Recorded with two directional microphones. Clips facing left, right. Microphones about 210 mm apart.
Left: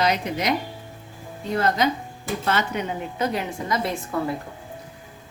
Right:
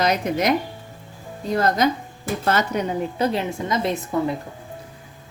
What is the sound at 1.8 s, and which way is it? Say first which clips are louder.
A woman's voice: right 2 dB; 45° right (ahead or behind).